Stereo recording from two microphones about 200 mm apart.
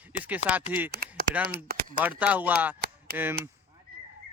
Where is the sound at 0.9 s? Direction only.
50° right (ahead or behind).